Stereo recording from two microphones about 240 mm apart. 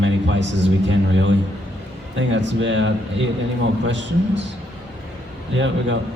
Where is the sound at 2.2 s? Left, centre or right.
Right.